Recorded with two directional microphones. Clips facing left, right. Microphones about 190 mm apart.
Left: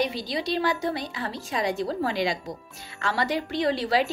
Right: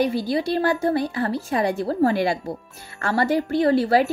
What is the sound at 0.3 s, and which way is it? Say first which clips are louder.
Speech: right 5 dB; 55° right (ahead or behind).